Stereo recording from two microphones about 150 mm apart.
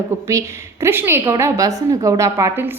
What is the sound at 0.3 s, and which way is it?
A woman's voice, 20° right (ahead or behind).